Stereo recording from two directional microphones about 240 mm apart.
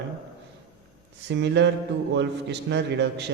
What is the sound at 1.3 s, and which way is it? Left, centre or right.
A man's voice, right.